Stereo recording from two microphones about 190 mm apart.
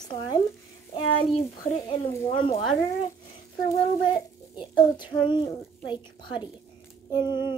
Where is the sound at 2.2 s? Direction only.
25° left (ahead or behind).